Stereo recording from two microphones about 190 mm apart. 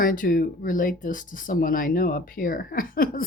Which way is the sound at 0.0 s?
50° left (ahead or behind).